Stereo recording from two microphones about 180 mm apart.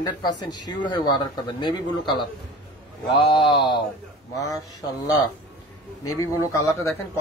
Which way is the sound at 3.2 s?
25° left (ahead or behind).